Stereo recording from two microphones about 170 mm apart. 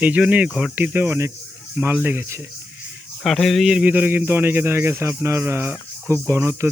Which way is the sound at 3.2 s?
Centre (ahead or behind).